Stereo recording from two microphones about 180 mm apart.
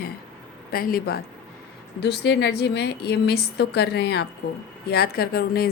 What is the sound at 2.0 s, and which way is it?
A woman's voice, 70° left (ahead or behind).